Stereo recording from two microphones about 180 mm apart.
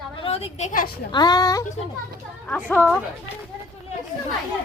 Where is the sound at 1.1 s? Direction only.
20° left (ahead or behind).